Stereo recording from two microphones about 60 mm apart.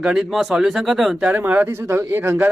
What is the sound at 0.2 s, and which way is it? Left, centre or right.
Speech, centre.